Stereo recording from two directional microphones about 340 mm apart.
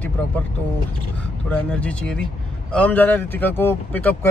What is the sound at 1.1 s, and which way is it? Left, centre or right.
Speech, centre.